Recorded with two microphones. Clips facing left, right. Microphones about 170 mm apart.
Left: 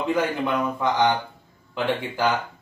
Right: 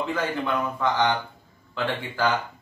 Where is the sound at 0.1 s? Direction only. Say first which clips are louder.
Left 3 dB; 15° left (ahead or behind).